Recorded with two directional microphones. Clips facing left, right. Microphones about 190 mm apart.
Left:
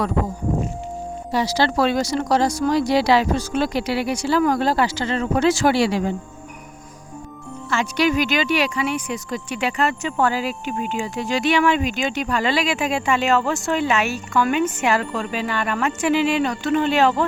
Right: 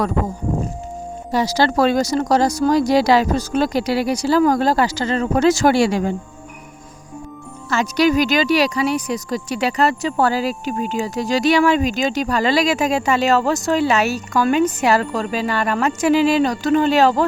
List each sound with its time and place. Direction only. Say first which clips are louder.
1.3 s speech: right 3 dB; 45° right (ahead or behind)
7.7 s speech: right 4 dB; 40° right (ahead or behind)